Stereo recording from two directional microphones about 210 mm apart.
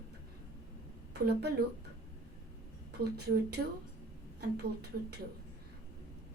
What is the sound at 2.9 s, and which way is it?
Speech, 50° right (ahead or behind).